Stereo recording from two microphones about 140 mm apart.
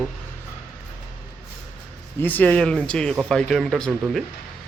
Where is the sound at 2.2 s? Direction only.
10° left (ahead or behind).